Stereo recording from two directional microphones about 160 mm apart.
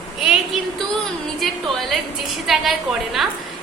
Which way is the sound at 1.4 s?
Centre (ahead or behind).